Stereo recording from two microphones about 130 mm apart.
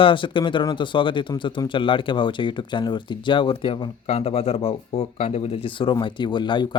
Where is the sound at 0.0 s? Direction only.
40° left (ahead or behind).